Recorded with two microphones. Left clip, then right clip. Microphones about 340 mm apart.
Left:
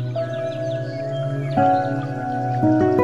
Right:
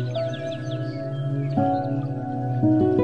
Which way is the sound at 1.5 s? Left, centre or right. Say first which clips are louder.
Left 6 dB; left.